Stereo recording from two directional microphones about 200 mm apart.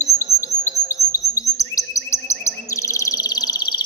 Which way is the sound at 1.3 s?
15° left (ahead or behind).